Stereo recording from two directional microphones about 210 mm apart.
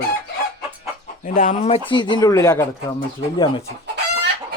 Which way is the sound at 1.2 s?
40° left (ahead or behind).